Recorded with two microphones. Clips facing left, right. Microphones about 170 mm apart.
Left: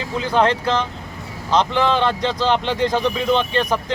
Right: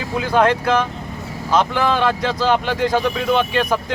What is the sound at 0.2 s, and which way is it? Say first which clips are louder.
Speech: right 2 dB; 10° right (ahead or behind).